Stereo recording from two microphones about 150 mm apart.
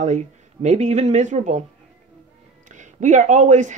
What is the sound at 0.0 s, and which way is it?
Speech, 50° right (ahead or behind).